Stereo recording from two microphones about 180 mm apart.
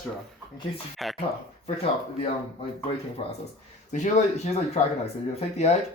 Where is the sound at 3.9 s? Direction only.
40° left (ahead or behind).